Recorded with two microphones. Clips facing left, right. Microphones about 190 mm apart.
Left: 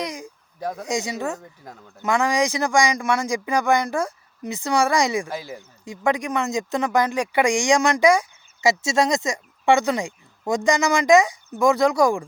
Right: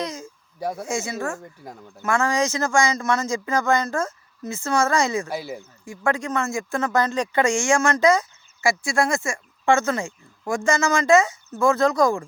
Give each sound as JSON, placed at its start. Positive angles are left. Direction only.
{"t": 0.0, "sound": "a sound", "side_deg": 15}
{"t": 0.8, "sound": "speech", "side_deg": 15}
{"t": 5.3, "sound": "speech", "side_deg": -10}
{"t": 5.8, "sound": "speech", "side_deg": 20}